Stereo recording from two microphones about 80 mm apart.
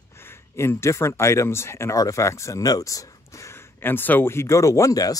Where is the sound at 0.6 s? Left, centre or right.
Left.